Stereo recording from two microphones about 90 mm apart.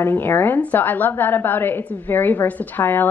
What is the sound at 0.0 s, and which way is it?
A woman's voice, 25° left (ahead or behind).